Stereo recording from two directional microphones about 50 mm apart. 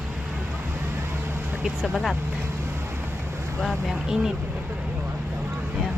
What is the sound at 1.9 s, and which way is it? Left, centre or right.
Speech, centre.